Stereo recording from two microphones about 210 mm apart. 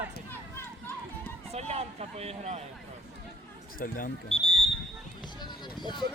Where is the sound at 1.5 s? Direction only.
30° right (ahead or behind).